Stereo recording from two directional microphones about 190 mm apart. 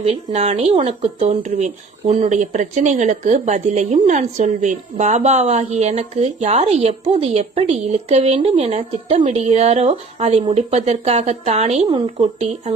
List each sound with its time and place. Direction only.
0.0 s speech: 35° right (ahead or behind)